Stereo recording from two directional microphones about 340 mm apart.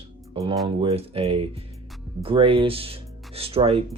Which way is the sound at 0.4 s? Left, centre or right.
Centre.